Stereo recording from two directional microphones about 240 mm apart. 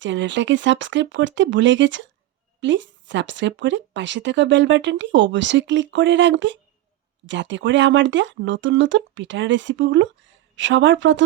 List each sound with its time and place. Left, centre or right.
0.0 s speech: right